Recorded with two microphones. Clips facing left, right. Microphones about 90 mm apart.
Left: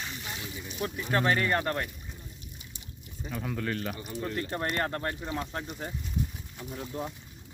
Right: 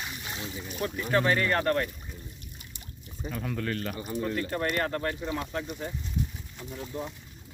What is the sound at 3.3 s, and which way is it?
Speech, 5° left (ahead or behind).